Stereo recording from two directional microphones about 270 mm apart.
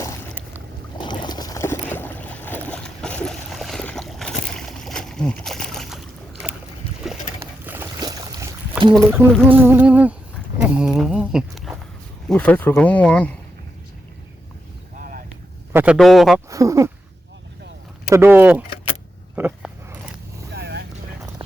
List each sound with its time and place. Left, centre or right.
0.9 s boat: centre
7.1 s boat: centre
9.1 s speech: centre
15.7 s speech: centre
16.5 s speech: centre
18.1 s speech: centre
19.4 s a sound: centre
20.5 s vehicle: right